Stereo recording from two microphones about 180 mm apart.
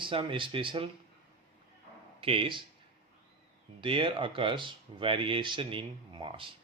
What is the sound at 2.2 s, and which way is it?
Speech, 30° right (ahead or behind).